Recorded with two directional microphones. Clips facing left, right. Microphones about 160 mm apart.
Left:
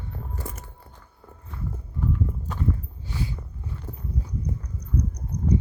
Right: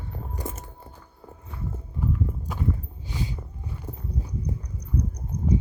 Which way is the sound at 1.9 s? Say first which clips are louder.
Left 1 dB; 10° right (ahead or behind).